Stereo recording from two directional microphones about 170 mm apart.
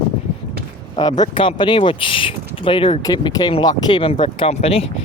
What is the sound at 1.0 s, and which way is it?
Speech, 25° left (ahead or behind).